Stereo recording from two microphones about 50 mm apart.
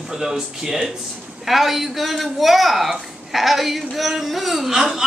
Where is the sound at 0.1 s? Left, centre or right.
Centre.